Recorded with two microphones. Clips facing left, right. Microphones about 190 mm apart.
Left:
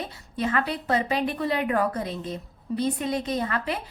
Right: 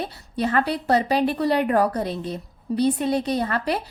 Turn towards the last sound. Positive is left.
turn(degrees=-35)  # may be behind; listen again after turning